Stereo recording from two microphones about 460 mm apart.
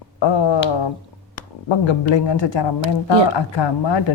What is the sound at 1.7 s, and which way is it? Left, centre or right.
Speech, left.